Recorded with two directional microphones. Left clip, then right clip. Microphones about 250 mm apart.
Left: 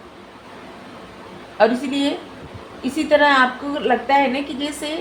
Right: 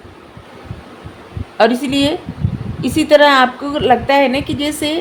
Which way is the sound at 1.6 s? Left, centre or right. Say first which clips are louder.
Right 4 dB; right.